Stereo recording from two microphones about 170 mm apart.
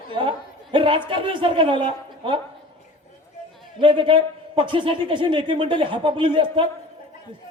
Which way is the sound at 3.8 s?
30° right (ahead or behind).